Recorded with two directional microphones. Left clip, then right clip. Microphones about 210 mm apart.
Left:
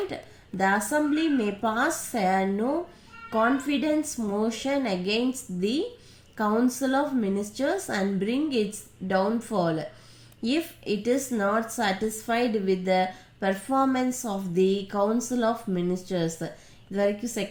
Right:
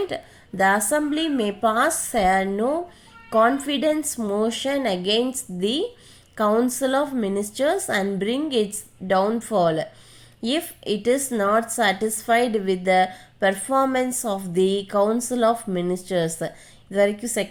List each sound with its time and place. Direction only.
0.1 s a woman's voice: 40° right (ahead or behind)